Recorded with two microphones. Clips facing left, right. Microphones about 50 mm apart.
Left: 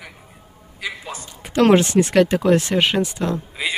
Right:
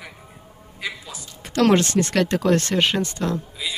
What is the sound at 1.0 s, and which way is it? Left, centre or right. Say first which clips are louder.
Speech: left 6 dB; left.